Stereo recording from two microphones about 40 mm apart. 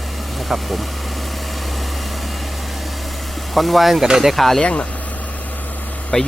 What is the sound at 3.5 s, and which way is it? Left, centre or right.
Speech, centre.